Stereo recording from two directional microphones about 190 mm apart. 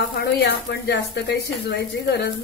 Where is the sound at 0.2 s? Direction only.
70° left (ahead or behind).